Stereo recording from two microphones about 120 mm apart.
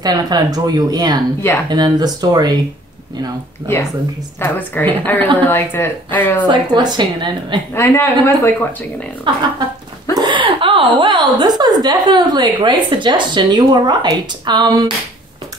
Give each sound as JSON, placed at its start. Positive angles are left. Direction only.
{"t": 0.0, "sound": "a woman's voice", "side_deg": -35}
{"t": 4.4, "sound": "speech", "side_deg": 15}
{"t": 6.4, "sound": "a woman's voice", "side_deg": -40}
{"t": 7.7, "sound": "speech", "side_deg": 20}
{"t": 9.3, "sound": "a woman's voice", "side_deg": -40}
{"t": 10.1, "sound": "a sound", "side_deg": -40}
{"t": 11.0, "sound": "a woman's voice", "side_deg": -40}